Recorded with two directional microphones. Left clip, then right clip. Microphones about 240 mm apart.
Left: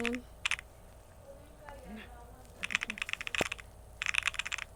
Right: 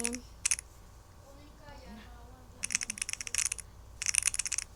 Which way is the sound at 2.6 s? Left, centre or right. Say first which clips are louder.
Left 2 dB; right.